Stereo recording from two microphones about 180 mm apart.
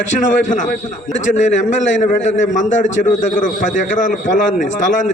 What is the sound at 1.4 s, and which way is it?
A man's voice, 40° left (ahead or behind).